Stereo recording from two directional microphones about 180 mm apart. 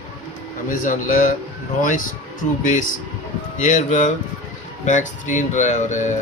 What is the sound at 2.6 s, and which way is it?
Speech, 45° left (ahead or behind).